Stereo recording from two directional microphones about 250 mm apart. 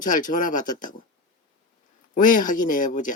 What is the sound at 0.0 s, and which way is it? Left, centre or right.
Speech, left.